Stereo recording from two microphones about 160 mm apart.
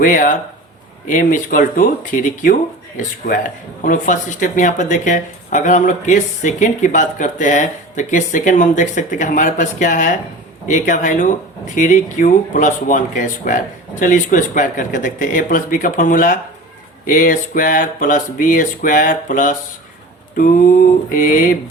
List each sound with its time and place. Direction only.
0.0 s speech: 60° left (ahead or behind)